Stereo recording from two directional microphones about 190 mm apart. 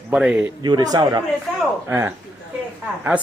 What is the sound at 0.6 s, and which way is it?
Speech, 20° right (ahead or behind).